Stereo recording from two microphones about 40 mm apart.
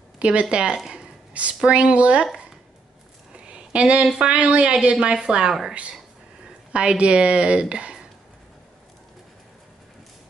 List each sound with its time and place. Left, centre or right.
0.2 s a woman's voice: right
1.3 s a woman's voice: right
3.3 s a sound: right
4.2 s a woman's voice: right
6.7 s a woman's voice: right